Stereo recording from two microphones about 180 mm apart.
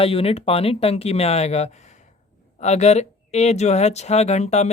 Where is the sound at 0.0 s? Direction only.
30° left (ahead or behind).